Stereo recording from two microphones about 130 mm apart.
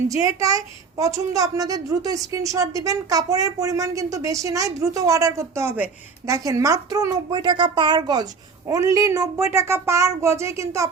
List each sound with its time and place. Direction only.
0.1 s a woman's voice: 25° right (ahead or behind)